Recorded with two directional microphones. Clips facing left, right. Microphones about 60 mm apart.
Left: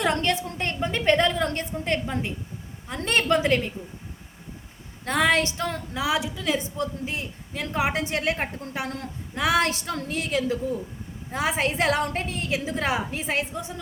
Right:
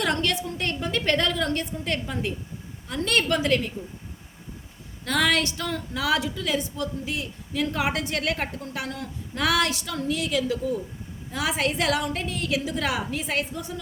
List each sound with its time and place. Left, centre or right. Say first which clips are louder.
0.0 s a woman's voice: left 1 dB; left
5.0 s a woman's voice: left 1 dB; left
6.0 s a woman's voice: right 1 dB; left
9.6 s a woman's voice: right 1 dB; left